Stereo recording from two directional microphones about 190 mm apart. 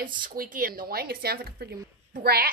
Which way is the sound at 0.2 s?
45° right (ahead or behind).